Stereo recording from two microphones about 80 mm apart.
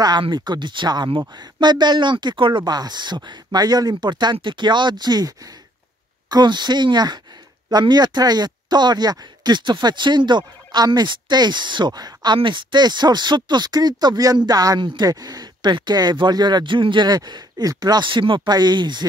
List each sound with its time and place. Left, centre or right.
0.0 s speech: right
6.3 s speech: right
17.1 s speech: right